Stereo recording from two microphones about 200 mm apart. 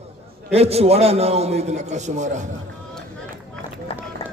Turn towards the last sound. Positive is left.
turn(degrees=30)  # may be behind; listen again after turning